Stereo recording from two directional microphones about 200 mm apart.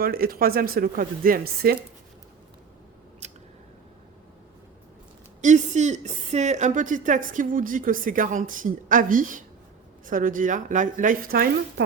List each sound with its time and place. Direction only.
0.0 s speech: 45° right (ahead or behind)
5.4 s a woman's voice: 35° right (ahead or behind)